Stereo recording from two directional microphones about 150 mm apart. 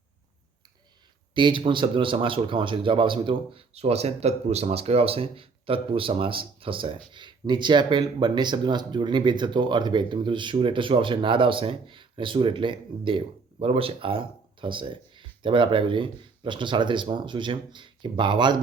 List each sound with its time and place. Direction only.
1.3 s speech: 30° right (ahead or behind)